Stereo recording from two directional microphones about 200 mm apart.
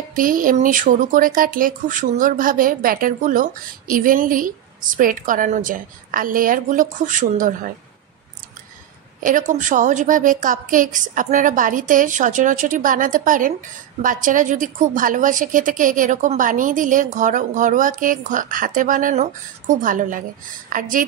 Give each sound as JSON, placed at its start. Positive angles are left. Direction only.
{"t": 0.1, "sound": "speech", "side_deg": -45}
{"t": 9.2, "sound": "a woman's voice", "side_deg": -40}